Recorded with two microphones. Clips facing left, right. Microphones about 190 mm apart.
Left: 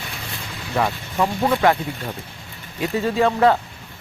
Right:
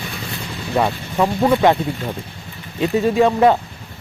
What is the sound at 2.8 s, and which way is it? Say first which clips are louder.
Speech: right 4 dB; 15° right (ahead or behind).